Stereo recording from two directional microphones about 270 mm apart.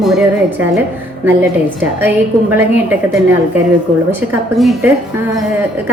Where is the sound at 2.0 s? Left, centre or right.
Centre.